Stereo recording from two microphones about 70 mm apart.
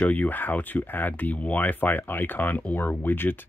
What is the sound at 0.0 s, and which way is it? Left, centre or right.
Speech, left.